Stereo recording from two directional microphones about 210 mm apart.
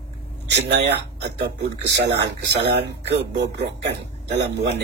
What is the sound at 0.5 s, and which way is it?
Speech, 55° right (ahead or behind).